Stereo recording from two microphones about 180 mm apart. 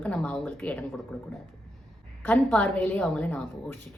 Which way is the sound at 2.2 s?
10° left (ahead or behind).